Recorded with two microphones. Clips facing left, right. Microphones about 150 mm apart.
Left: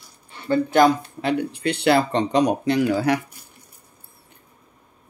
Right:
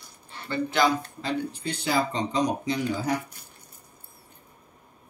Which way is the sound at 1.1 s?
65° left (ahead or behind).